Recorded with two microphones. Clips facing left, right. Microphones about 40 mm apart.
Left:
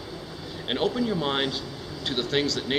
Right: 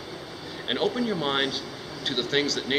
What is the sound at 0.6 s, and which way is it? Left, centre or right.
A man's voice, centre.